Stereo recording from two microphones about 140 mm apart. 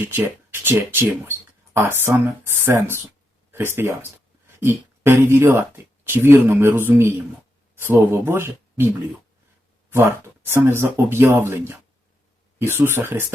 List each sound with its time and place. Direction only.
0.6 s speech: 15° right (ahead or behind)